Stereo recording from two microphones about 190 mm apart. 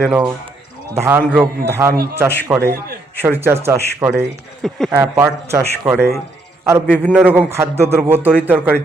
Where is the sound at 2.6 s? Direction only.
55° right (ahead or behind).